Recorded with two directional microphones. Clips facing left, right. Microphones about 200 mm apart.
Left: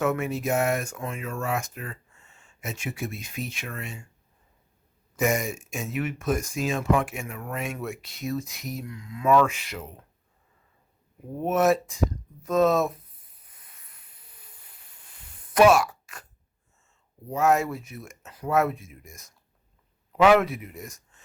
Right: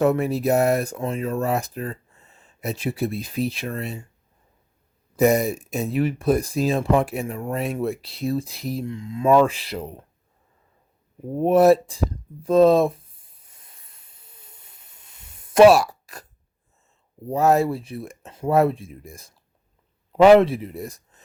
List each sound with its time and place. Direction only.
0.0 s speech: 35° right (ahead or behind)
5.1 s speech: 35° right (ahead or behind)
11.3 s speech: 35° right (ahead or behind)
13.5 s a sound: 25° right (ahead or behind)
17.2 s speech: 35° right (ahead or behind)